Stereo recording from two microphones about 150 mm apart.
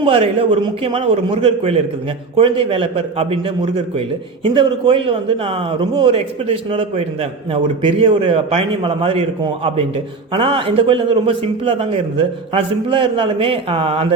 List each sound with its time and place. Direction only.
0.0 s a man's voice: 35° right (ahead or behind)